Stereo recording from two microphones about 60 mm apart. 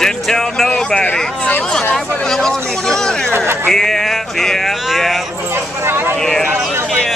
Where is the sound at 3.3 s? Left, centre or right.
Right.